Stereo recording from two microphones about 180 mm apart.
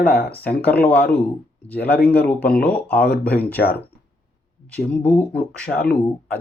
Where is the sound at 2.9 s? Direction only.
60° left (ahead or behind).